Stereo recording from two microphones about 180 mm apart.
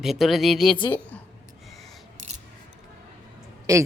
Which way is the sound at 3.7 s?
20° right (ahead or behind).